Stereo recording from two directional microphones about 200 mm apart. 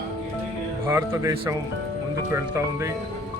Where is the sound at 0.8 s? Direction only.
15° right (ahead or behind).